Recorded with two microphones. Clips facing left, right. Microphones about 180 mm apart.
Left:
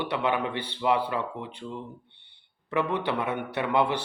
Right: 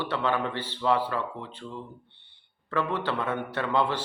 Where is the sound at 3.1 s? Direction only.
15° left (ahead or behind).